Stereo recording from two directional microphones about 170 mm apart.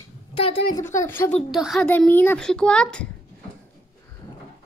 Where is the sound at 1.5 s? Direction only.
5° right (ahead or behind).